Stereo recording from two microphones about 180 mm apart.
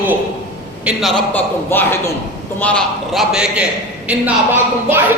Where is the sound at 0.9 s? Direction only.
Centre (ahead or behind).